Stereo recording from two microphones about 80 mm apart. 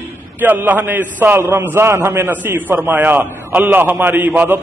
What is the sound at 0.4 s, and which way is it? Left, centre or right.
A man's voice, right.